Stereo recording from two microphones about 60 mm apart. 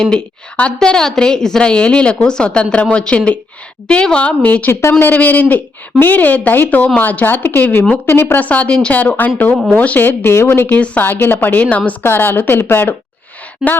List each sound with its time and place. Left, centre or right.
0.0 s a woman's voice: centre
4.7 s speech: left
5.1 s speech: left
8.4 s speech: left
10.3 s speech: left
10.7 s speech: left